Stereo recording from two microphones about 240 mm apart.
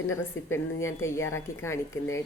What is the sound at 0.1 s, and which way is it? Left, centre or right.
A woman's voice, centre.